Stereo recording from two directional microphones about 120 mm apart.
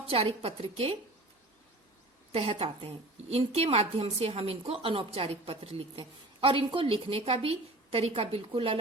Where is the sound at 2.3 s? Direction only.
55° right (ahead or behind).